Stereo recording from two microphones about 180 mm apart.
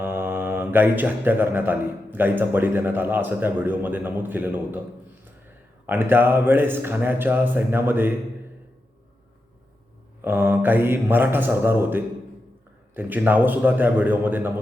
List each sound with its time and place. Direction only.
0.0 s speech: 10° right (ahead or behind)
5.8 s speech: 10° right (ahead or behind)
10.2 s speech: 10° right (ahead or behind)